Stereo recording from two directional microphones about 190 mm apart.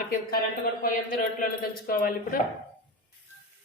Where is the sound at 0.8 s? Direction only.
50° left (ahead or behind).